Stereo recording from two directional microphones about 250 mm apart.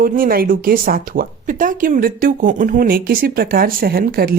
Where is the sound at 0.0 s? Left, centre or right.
Right.